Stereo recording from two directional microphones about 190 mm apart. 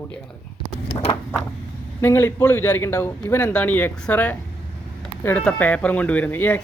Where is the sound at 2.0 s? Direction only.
15° left (ahead or behind).